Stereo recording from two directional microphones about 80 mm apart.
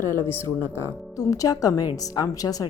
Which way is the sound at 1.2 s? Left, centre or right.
Left.